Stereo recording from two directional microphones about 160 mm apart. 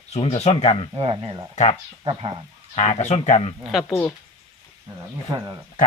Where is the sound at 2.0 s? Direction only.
35° right (ahead or behind).